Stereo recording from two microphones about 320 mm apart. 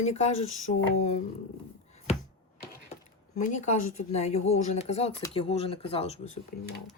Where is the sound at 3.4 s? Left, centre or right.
Left.